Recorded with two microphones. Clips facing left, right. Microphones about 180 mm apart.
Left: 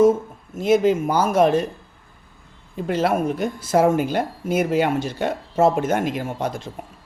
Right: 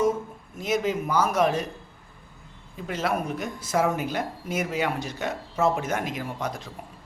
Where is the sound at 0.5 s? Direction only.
30° left (ahead or behind).